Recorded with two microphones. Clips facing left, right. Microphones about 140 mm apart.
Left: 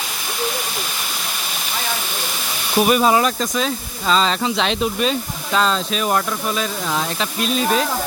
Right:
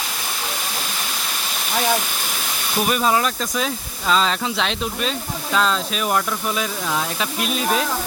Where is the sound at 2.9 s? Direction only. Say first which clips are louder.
Left 3 dB; 10° left (ahead or behind).